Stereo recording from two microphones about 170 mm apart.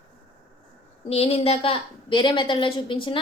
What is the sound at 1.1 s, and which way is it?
A woman's voice, 35° left (ahead or behind).